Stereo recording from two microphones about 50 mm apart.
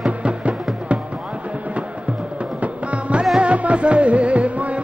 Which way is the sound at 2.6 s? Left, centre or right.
Right.